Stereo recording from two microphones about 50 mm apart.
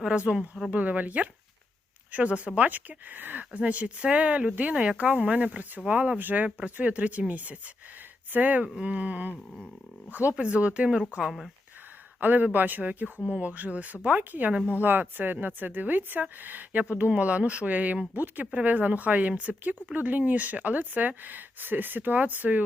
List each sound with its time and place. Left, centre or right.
0.0 s speech: right
0.7 s speech: right
10.3 s speech: right
11.2 s speech: centre
12.2 s speech: right